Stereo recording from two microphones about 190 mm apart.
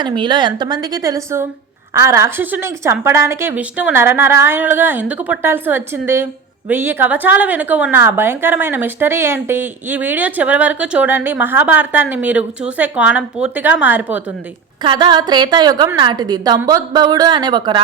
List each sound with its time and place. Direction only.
0.0 s a woman's voice: 25° right (ahead or behind); by 14.2 s 10° right (ahead or behind)
14.8 s a woman's voice: 25° right (ahead or behind)